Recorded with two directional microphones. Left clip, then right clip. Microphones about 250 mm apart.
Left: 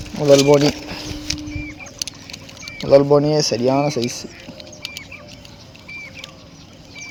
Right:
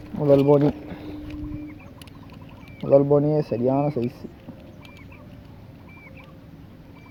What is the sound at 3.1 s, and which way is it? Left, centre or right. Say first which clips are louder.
Speech: left 5 dB; centre.